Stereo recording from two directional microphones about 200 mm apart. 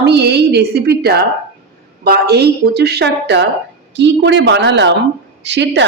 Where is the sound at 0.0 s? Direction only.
55° right (ahead or behind).